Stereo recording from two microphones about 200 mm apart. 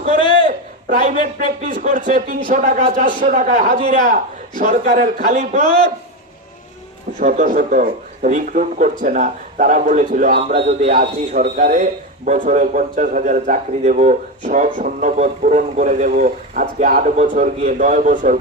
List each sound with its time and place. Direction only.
0.2 s a sound: 25° left (ahead or behind)
0.4 s speech: 40° right (ahead or behind)
7.2 s speech: 40° right (ahead or behind)
11.0 s speech: 45° right (ahead or behind)